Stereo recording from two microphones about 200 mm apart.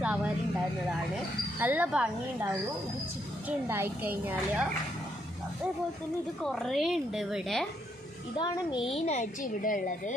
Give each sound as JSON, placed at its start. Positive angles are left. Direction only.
{"t": 0.0, "sound": "a sound", "side_deg": -5}
{"t": 1.6, "sound": "a woman's voice", "side_deg": -10}
{"t": 6.4, "sound": "a woman's voice", "side_deg": 0}
{"t": 8.4, "sound": "a woman's voice", "side_deg": 25}